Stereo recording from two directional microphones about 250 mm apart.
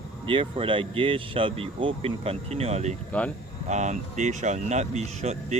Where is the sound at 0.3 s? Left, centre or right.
Right.